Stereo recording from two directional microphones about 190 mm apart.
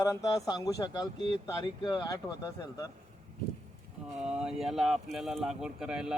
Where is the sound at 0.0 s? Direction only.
15° left (ahead or behind).